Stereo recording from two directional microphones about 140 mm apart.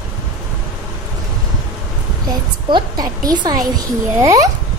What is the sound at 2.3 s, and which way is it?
A woman's voice, 30° right (ahead or behind).